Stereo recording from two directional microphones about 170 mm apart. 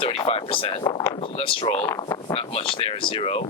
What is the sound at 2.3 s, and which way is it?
Speech, 35° left (ahead or behind).